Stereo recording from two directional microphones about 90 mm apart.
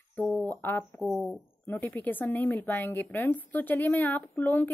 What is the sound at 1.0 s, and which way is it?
Speech, centre (ahead or behind).